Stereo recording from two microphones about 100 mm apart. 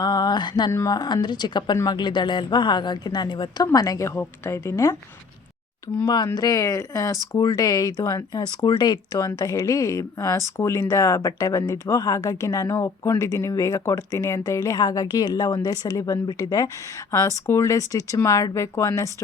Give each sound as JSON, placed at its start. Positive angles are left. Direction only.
{"t": 0.0, "sound": "a sound", "side_deg": 45}
{"t": 0.9, "sound": "a woman's voice", "side_deg": 45}
{"t": 3.7, "sound": "a woman's voice", "side_deg": 35}
{"t": 6.2, "sound": "speech", "side_deg": 35}